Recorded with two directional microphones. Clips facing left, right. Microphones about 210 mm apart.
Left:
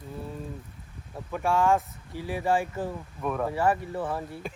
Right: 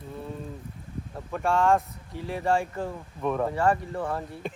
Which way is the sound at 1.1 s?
Centre (ahead or behind).